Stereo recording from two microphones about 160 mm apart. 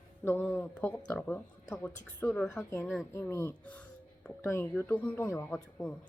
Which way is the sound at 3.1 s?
15° left (ahead or behind).